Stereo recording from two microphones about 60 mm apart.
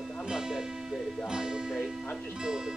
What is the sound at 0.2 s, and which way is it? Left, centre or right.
Music, centre.